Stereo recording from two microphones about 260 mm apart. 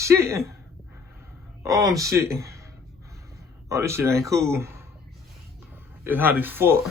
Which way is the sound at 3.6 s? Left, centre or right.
Centre.